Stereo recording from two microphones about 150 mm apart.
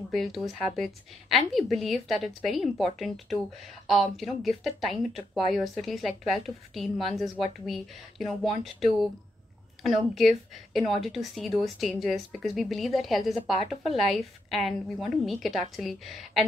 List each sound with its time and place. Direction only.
0.1 s a woman's voice: centre (ahead or behind)